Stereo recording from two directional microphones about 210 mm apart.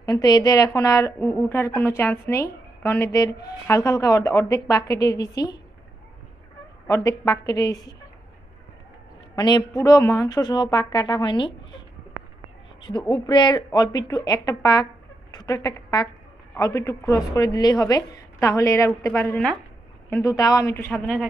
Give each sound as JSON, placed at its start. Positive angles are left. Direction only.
{"t": 0.0, "sound": "a woman's voice", "side_deg": 20}
{"t": 6.9, "sound": "a woman's voice", "side_deg": 15}
{"t": 9.3, "sound": "a woman's voice", "side_deg": 20}
{"t": 12.8, "sound": "a woman's voice", "side_deg": 20}
{"t": 20.9, "sound": "speech", "side_deg": 0}